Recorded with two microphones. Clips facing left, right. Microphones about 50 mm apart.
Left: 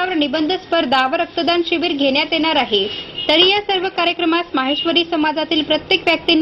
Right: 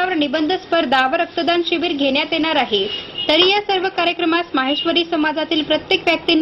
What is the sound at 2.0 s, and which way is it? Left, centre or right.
Speech, left.